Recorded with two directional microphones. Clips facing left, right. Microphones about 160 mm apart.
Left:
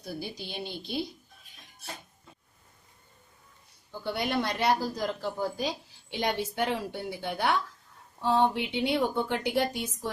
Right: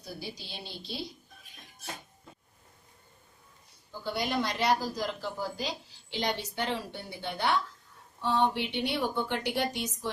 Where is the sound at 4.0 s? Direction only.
55° left (ahead or behind).